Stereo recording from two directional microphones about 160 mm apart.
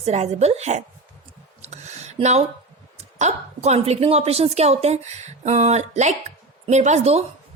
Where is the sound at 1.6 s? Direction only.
45° right (ahead or behind).